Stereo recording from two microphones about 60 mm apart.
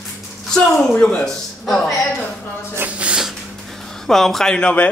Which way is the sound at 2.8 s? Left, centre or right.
Right.